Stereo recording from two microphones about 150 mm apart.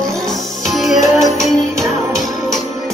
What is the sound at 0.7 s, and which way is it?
Music, centre (ahead or behind).